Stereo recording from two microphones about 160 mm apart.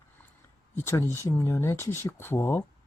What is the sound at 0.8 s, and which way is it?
Speech, 15° left (ahead or behind).